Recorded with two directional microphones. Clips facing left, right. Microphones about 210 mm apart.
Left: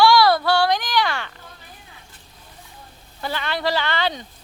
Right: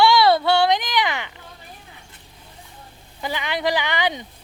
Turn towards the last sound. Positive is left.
turn(degrees=-20)  # may be behind; listen again after turning